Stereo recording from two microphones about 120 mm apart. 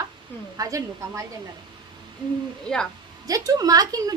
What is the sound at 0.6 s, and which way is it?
Speech, 25° right (ahead or behind).